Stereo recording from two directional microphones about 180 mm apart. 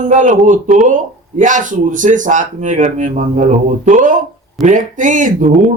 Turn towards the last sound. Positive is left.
turn(degrees=-45)  # may be behind; listen again after turning